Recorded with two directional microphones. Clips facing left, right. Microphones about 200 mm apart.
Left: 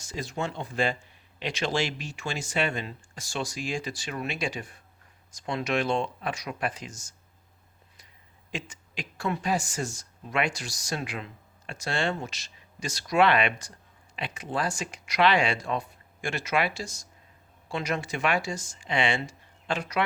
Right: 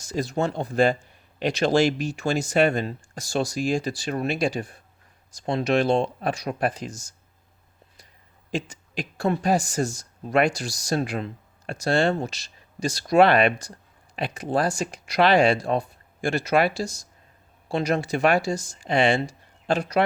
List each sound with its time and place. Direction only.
0.0 s speech: 40° right (ahead or behind)
8.4 s speech: 35° right (ahead or behind)